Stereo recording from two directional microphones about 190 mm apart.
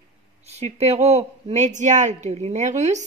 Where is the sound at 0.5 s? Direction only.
35° right (ahead or behind).